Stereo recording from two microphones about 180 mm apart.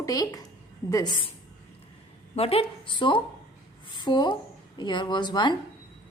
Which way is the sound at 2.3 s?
35° left (ahead or behind).